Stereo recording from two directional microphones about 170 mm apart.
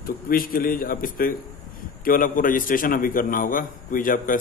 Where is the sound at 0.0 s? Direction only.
60° left (ahead or behind).